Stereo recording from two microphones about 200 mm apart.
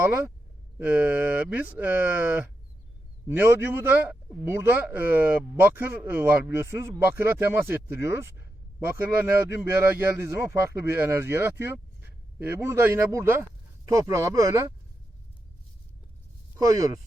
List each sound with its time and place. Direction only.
0.8 s a man's voice: 10° right (ahead or behind)
16.6 s a man's voice: 15° right (ahead or behind)